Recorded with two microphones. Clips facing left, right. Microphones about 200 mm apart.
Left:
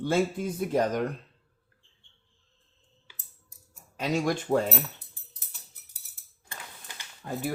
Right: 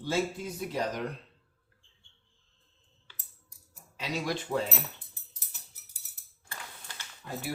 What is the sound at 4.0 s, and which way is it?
Speech, 50° left (ahead or behind).